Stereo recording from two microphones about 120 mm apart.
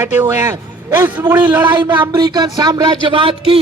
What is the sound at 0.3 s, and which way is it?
A man's voice, 25° right (ahead or behind).